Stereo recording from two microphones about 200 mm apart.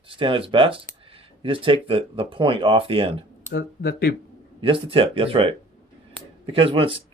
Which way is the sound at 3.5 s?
50° left (ahead or behind).